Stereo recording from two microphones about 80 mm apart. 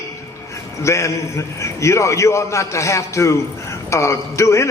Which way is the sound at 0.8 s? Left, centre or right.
Left.